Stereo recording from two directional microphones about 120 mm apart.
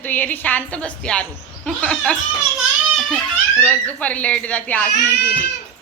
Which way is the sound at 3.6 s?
15° left (ahead or behind).